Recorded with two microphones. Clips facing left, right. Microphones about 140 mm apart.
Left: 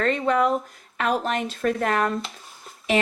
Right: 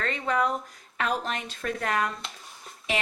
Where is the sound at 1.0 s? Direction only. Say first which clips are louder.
Left 6 dB; 55° left (ahead or behind).